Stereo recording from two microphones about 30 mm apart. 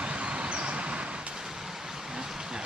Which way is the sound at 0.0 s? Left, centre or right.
Right.